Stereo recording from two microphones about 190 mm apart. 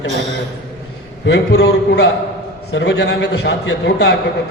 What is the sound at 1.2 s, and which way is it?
A man's voice, 65° left (ahead or behind).